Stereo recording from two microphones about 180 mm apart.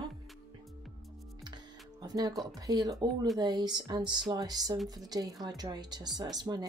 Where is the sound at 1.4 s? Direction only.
25° right (ahead or behind).